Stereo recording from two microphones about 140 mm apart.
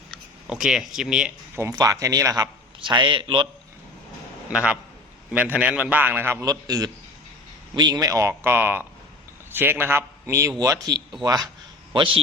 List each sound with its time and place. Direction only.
0.1 s speech: 5° right (ahead or behind)
1.5 s a man's voice: 20° right (ahead or behind); by 3.5 s 35° right (ahead or behind)
4.5 s a man's voice: 5° right (ahead or behind); by 11.0 s 25° right (ahead or behind)
11.9 s a man's voice: 40° right (ahead or behind)